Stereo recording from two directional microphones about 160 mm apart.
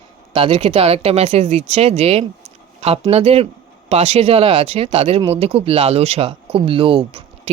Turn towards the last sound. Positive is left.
turn(degrees=-35)  # may be behind; listen again after turning